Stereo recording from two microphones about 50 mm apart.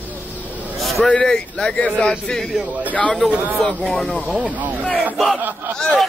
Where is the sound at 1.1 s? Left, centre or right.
Centre.